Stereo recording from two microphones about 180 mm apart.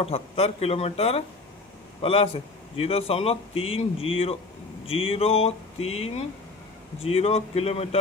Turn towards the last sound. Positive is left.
turn(degrees=35)  # may be behind; listen again after turning